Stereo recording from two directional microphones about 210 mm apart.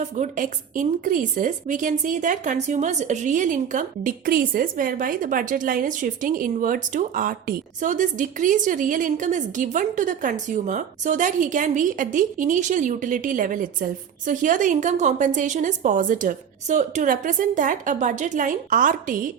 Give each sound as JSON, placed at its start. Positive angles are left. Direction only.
{"t": 0.0, "sound": "a woman's voice", "side_deg": -35}